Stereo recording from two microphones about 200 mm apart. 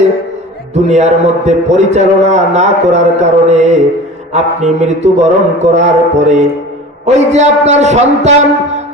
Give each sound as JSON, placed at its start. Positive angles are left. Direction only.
{"t": 0.9, "sound": "a man's voice", "side_deg": -35}